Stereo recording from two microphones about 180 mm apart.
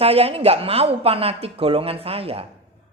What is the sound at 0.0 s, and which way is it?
A woman's voice, 35° right (ahead or behind).